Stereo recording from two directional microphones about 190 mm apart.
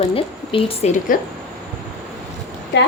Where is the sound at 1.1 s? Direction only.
45° left (ahead or behind).